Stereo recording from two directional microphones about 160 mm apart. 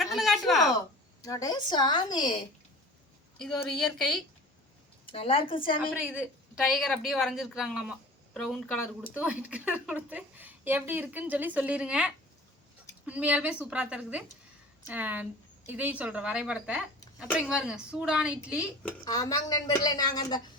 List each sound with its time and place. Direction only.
0.0 s a sound: centre (ahead or behind)
1.2 s a woman's voice: 20° left (ahead or behind)
3.3 s speech: 5° left (ahead or behind)
5.0 s a woman's voice: 35° left (ahead or behind)
5.9 s speech: 5° right (ahead or behind)
19.0 s a woman's voice: 25° left (ahead or behind)